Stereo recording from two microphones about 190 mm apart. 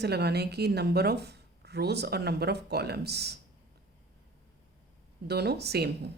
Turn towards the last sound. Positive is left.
turn(degrees=-60)  # may be behind; listen again after turning